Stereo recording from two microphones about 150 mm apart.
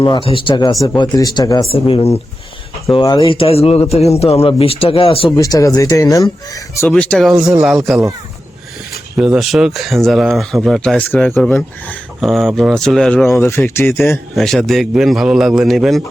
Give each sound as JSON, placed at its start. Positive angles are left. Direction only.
{"t": 0.0, "sound": "speech", "side_deg": 35}
{"t": 1.7, "sound": "speech", "side_deg": 40}
{"t": 5.4, "sound": "speech", "side_deg": 20}
{"t": 6.8, "sound": "speech", "side_deg": 5}
{"t": 9.1, "sound": "speech", "side_deg": -5}
{"t": 12.2, "sound": "speech", "side_deg": 0}
{"t": 13.4, "sound": "speech", "side_deg": 15}
{"t": 14.3, "sound": "speech", "side_deg": 0}